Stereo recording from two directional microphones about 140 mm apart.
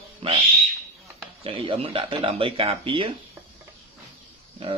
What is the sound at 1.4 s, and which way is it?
Speech, 40° right (ahead or behind).